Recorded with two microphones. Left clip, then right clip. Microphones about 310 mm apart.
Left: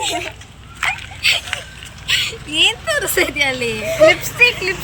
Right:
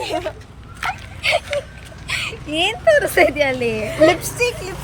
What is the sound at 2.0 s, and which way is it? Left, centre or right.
Speech, centre.